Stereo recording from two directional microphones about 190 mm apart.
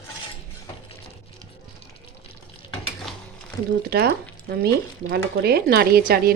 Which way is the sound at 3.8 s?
55° right (ahead or behind).